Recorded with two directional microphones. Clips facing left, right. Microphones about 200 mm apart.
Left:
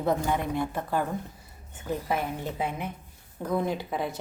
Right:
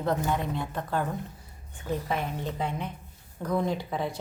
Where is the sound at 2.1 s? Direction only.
10° left (ahead or behind).